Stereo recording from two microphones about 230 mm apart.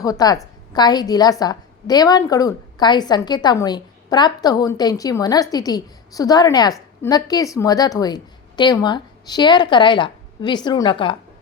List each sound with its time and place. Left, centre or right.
0.0 s a woman's voice: centre